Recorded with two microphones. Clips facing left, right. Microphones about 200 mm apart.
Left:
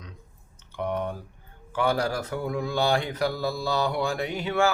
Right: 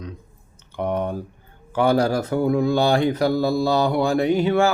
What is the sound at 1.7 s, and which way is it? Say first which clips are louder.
Mantra: right 7 dB; 35° right (ahead or behind).